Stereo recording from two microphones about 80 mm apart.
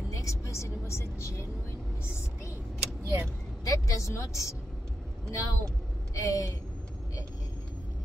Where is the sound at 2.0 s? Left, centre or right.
Left.